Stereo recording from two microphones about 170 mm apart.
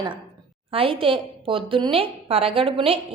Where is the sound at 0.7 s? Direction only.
30° right (ahead or behind).